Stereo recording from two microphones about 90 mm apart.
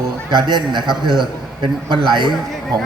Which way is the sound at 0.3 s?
55° right (ahead or behind).